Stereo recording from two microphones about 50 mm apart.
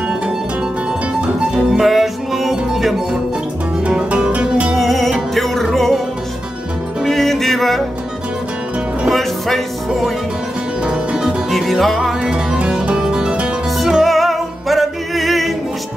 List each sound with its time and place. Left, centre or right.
1.7 s music: centre
3.8 s music: right
4.6 s music: centre
7.1 s music: centre
10.8 s music: centre
11.5 s music: centre
12.2 s music: centre
13.7 s music: centre